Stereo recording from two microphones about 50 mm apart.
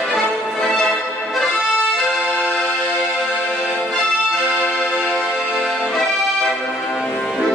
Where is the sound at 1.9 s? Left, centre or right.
Centre.